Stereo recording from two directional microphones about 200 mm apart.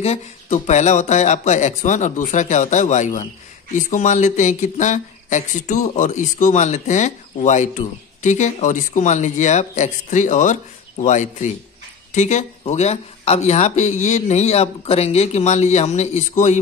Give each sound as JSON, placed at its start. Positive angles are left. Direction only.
{"t": 0.0, "sound": "speech", "side_deg": 35}